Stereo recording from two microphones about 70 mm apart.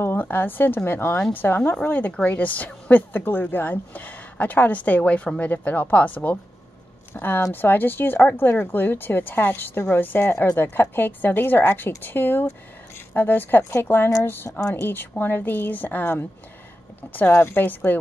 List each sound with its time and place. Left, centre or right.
0.0 s a woman's voice: left
17.3 s speech: left